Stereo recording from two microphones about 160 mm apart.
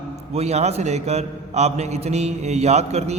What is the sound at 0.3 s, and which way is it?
A man's voice, 45° right (ahead or behind).